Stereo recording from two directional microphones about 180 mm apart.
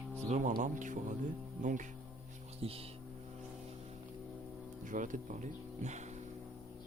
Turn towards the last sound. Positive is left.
turn(degrees=-40)  # may be behind; listen again after turning